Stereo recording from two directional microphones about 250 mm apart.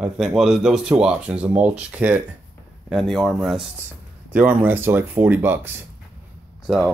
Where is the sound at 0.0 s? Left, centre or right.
Centre.